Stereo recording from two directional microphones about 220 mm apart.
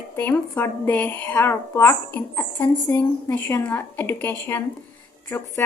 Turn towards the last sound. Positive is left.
turn(degrees=10)  # may be behind; listen again after turning